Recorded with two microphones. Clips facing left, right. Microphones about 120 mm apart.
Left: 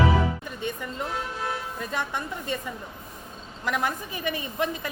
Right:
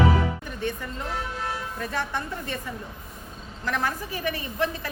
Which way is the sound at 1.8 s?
15° left (ahead or behind).